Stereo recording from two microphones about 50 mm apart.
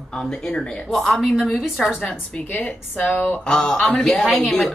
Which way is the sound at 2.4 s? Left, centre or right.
Left.